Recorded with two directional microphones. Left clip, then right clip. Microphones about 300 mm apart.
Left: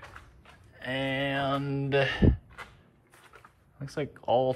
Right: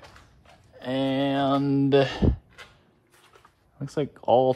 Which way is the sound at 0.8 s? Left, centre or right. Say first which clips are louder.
Right 4 dB; centre.